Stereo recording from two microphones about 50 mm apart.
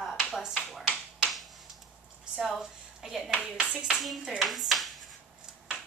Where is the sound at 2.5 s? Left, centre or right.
Centre.